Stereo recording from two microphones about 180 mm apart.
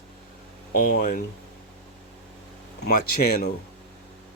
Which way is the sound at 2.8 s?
55° left (ahead or behind).